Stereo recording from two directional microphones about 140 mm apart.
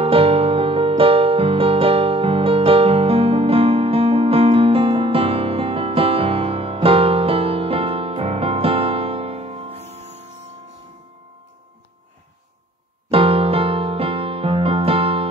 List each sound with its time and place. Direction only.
0.0 s music: 40° right (ahead or behind)
13.1 s music: 40° right (ahead or behind)